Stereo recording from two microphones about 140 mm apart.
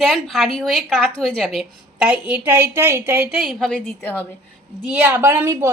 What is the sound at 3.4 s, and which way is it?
Speech, centre (ahead or behind).